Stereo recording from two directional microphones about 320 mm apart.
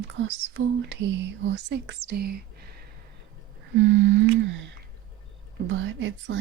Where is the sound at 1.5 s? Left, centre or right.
Right.